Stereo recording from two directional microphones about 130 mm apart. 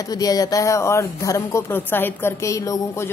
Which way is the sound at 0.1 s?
30° left (ahead or behind).